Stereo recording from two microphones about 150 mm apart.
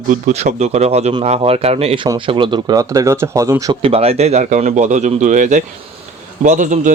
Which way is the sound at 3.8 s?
40° right (ahead or behind).